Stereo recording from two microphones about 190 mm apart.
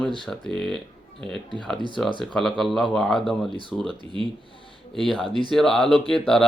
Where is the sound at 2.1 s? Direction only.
Centre (ahead or behind).